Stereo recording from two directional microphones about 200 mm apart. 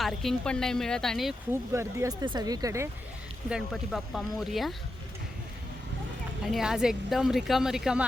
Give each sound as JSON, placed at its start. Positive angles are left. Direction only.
{"t": 0.0, "sound": "speech", "side_deg": 0}
{"t": 1.7, "sound": "speech", "side_deg": -15}
{"t": 3.5, "sound": "speech", "side_deg": 0}
{"t": 6.5, "sound": "speech", "side_deg": 0}